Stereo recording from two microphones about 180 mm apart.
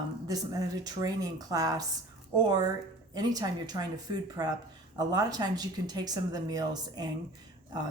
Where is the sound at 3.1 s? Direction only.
20° right (ahead or behind).